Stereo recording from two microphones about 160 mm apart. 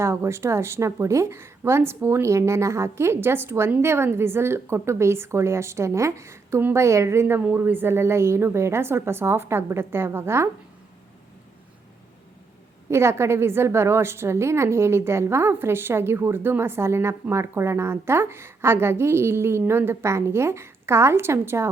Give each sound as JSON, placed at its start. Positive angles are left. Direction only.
{"t": 0.0, "sound": "a woman's voice", "side_deg": -15}
{"t": 12.9, "sound": "a woman's voice", "side_deg": -15}